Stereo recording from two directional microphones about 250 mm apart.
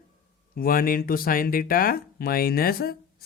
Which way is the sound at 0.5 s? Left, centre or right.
Left.